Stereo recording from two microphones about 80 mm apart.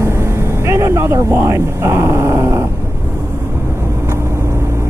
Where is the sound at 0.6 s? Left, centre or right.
Right.